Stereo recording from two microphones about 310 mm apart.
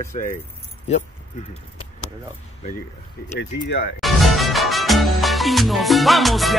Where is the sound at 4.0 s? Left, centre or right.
Centre.